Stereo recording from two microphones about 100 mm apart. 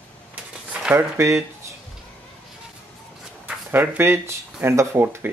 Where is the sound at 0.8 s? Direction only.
15° right (ahead or behind).